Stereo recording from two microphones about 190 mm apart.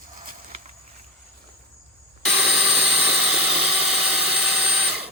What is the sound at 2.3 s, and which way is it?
Vehicle, 5° right (ahead or behind).